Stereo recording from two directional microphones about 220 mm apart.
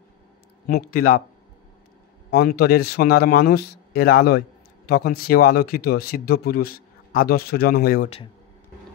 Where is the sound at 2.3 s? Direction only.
45° left (ahead or behind).